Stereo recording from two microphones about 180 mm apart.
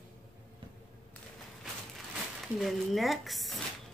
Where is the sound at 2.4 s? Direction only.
Centre (ahead or behind).